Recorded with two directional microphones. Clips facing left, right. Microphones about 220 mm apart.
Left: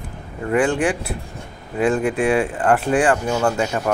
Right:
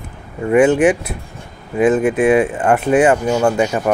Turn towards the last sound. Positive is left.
turn(degrees=-15)  # may be behind; listen again after turning